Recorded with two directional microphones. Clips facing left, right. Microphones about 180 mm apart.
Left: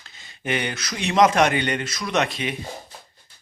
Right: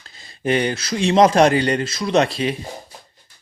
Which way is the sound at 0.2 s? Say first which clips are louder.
Right 7 dB; 35° right (ahead or behind).